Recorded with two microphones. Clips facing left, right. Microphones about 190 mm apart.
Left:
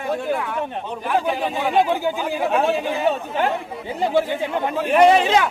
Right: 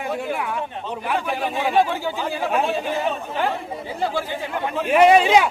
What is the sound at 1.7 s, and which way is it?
Speech, 15° left (ahead or behind).